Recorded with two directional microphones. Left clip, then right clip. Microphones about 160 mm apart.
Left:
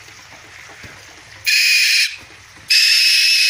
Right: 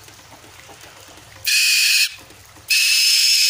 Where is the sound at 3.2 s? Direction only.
65° right (ahead or behind).